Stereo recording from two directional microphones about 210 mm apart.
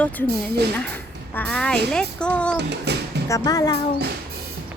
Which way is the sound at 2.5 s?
55° right (ahead or behind).